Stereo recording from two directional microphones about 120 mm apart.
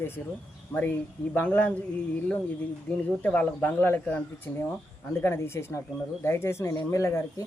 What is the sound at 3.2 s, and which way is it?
Speech, 15° left (ahead or behind).